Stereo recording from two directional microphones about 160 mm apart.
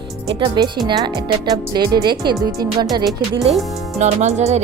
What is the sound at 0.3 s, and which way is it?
Speech, 30° right (ahead or behind).